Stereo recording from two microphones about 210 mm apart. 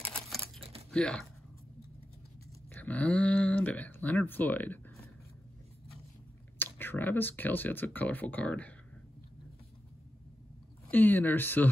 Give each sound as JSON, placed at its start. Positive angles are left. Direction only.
{"t": 0.6, "sound": "crumpling", "side_deg": -30}
{"t": 0.9, "sound": "speech", "side_deg": 5}
{"t": 2.7, "sound": "speech", "side_deg": 5}
{"t": 6.6, "sound": "speech", "side_deg": 10}
{"t": 10.9, "sound": "speech", "side_deg": 10}